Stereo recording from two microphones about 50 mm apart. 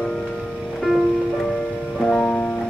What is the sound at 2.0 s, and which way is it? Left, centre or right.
Music, centre.